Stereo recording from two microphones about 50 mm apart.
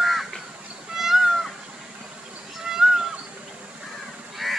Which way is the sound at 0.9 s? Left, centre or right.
Centre.